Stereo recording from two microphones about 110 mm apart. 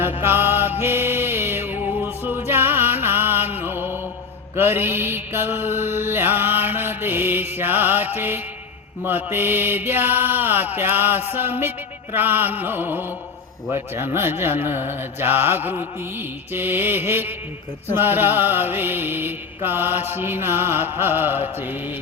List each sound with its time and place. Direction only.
0.2 s music: 20° right (ahead or behind)
4.5 s mantra: 20° right (ahead or behind)